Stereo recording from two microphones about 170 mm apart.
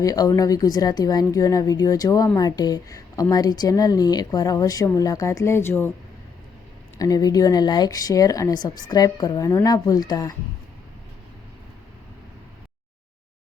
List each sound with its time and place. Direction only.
0.0 s a woman's voice: 20° left (ahead or behind)
7.0 s a woman's voice: 20° left (ahead or behind)